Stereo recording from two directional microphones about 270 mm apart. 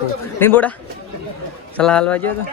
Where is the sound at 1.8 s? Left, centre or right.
Centre.